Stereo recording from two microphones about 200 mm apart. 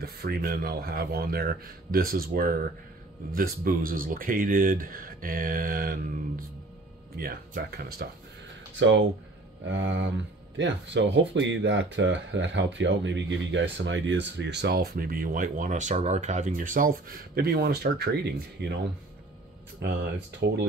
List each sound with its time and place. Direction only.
0.0 s speech: 50° right (ahead or behind)
7.2 s speech: 45° right (ahead or behind)
8.7 s speech: 70° right (ahead or behind)
19.8 s speech: 55° right (ahead or behind)